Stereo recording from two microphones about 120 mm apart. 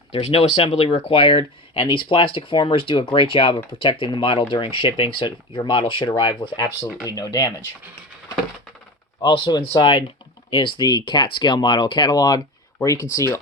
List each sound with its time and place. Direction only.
0.1 s speech: 60° left (ahead or behind); by 6.6 s 45° left (ahead or behind)
7.0 s speech: 30° left (ahead or behind)
9.2 s speech: 40° left (ahead or behind); by 13.4 s 25° left (ahead or behind)